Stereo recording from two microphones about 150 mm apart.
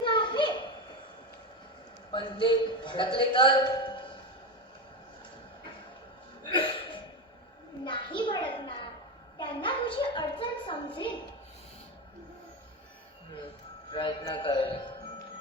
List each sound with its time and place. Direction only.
0.0 s children playing: 30° left (ahead or behind)
2.1 s a man's voice: 30° left (ahead or behind)
6.5 s a sound: 35° left (ahead or behind)
13.9 s a man's voice: 35° left (ahead or behind)